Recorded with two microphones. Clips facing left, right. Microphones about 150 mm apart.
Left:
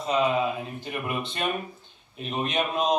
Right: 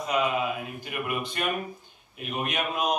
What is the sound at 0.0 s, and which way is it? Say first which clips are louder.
Speech: left 2 dB; 25° left (ahead or behind).